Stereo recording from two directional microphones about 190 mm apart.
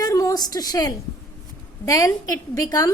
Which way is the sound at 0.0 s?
20° left (ahead or behind).